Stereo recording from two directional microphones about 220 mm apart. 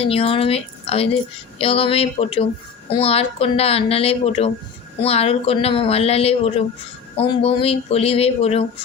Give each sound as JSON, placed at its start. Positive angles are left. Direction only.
{"t": 0.0, "sound": "a woman's voice", "side_deg": 25}